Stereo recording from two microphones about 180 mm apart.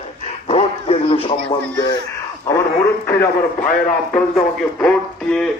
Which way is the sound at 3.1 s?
10° left (ahead or behind).